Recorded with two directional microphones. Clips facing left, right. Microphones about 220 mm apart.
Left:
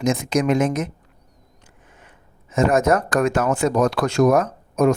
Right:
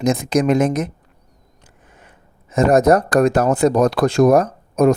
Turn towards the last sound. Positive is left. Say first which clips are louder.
# right 3 dB
turn(degrees=-35)  # may be behind; listen again after turning